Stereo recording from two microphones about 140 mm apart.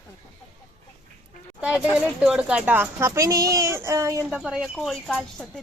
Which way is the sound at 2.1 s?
5° right (ahead or behind).